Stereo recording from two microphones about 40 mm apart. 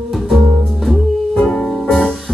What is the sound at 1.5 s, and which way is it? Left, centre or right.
Music, centre.